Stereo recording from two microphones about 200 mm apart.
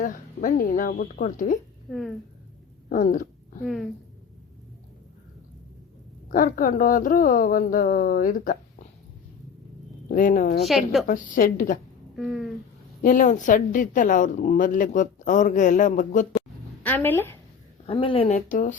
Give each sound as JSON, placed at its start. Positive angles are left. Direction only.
{"t": 0.0, "sound": "speech", "side_deg": 40}
{"t": 1.9, "sound": "a woman's voice", "side_deg": 0}
{"t": 2.9, "sound": "a sound", "side_deg": 40}
{"t": 3.6, "sound": "a woman's voice", "side_deg": 0}
{"t": 6.3, "sound": "speech", "side_deg": 45}
{"t": 10.1, "sound": "speech", "side_deg": 40}
{"t": 10.6, "sound": "a woman's voice", "side_deg": 0}
{"t": 11.0, "sound": "speech", "side_deg": 45}
{"t": 12.1, "sound": "a sound", "side_deg": 0}
{"t": 13.0, "sound": "a woman's voice", "side_deg": 40}
{"t": 16.8, "sound": "speech", "side_deg": 10}
{"t": 17.8, "sound": "a woman's voice", "side_deg": 25}